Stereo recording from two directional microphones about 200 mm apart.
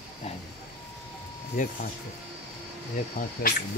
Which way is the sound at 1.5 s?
40° left (ahead or behind).